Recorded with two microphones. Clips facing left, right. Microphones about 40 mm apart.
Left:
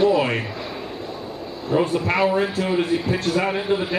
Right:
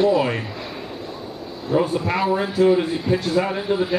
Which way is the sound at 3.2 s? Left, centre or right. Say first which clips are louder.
Right 1 dB; left.